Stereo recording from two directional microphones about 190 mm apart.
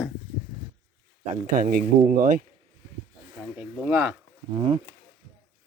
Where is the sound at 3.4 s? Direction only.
5° right (ahead or behind).